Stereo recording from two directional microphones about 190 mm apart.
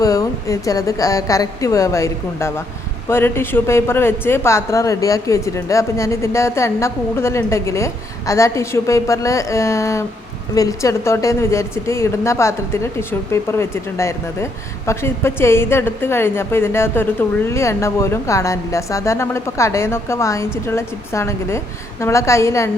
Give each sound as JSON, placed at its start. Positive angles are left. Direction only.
{"t": 0.0, "sound": "a woman's voice", "side_deg": 15}